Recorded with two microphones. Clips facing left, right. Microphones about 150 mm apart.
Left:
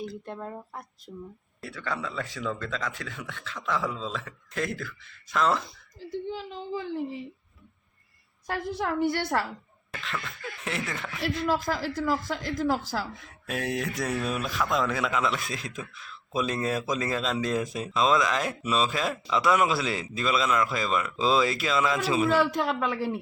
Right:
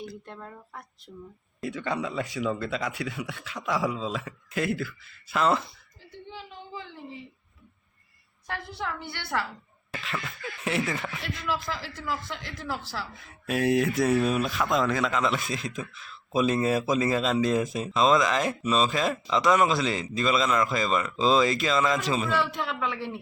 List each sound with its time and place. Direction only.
0.3 s speech: 25° left (ahead or behind)
1.6 s speech: 20° right (ahead or behind); by 5.6 s 5° right (ahead or behind)
6.1 s a man's voice: 40° left (ahead or behind)
8.4 s speech: 45° left (ahead or behind)
9.9 s speech: 5° right (ahead or behind)
11.2 s speech: 40° left (ahead or behind)
13.1 s speech: centre (ahead or behind)
22.3 s a man's voice: 40° left (ahead or behind)